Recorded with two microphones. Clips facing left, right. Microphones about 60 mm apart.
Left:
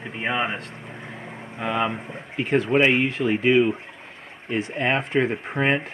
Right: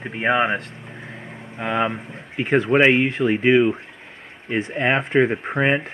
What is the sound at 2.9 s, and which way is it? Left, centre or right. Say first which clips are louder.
Speech: right 3 dB; right.